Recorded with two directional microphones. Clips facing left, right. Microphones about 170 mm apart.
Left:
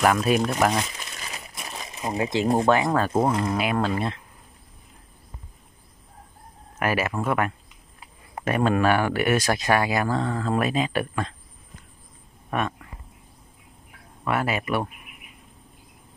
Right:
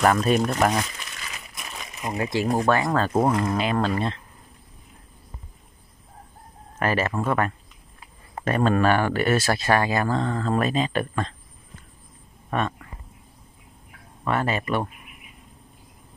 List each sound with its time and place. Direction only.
0.0 s speech: 5° left (ahead or behind)
1.1 s speech: 30° left (ahead or behind); by 4.2 s 10° left (ahead or behind)
6.8 s speech: 10° left (ahead or behind)
12.4 s speech: 10° left (ahead or behind)
14.2 s speech: 10° left (ahead or behind)